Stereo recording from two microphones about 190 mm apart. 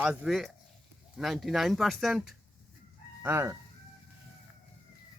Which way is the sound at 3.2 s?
15° right (ahead or behind).